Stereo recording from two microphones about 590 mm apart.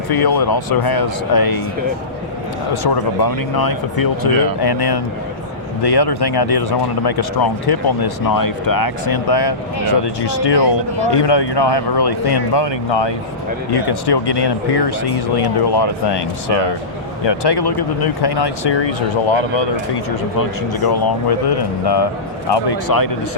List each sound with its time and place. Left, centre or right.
0.1 s speech: left
2.8 s speech: left
17.2 s speech: left
20.4 s speech: left